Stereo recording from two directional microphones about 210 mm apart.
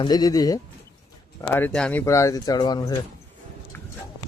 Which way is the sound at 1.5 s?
5° left (ahead or behind).